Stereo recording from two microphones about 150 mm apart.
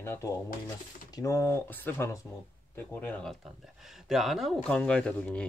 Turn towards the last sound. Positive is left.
turn(degrees=10)  # may be behind; listen again after turning